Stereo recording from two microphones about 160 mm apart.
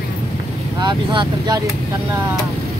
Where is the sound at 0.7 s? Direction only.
25° right (ahead or behind).